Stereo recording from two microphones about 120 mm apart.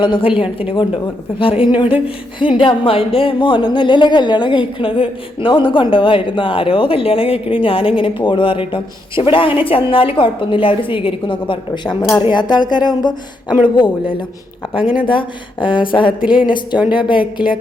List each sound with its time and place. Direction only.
0.0 s speech: 45° left (ahead or behind)
14.8 s speech: 5° right (ahead or behind)
15.0 s speech: 45° left (ahead or behind)
16.2 s speech: 5° right (ahead or behind)
16.9 s speech: 45° left (ahead or behind)